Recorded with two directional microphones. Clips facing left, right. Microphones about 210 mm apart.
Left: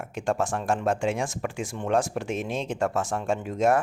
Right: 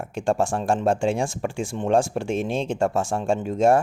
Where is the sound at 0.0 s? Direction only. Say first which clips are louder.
Right 4 dB; 30° right (ahead or behind).